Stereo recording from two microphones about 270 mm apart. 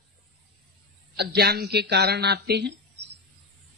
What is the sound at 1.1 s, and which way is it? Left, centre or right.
A man's voice, right.